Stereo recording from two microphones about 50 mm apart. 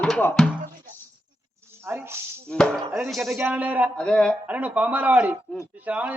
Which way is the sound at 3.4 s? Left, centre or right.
Right.